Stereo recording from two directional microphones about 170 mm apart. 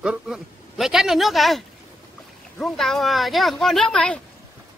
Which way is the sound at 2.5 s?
Centre (ahead or behind).